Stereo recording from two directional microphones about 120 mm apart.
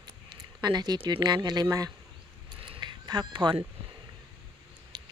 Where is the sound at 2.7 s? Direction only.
40° right (ahead or behind).